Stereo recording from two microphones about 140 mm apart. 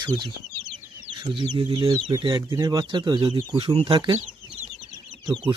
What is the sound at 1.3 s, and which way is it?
Speech, 30° right (ahead or behind).